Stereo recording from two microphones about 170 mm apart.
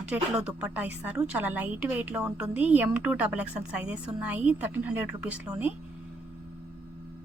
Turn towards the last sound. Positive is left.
turn(degrees=-5)  # may be behind; listen again after turning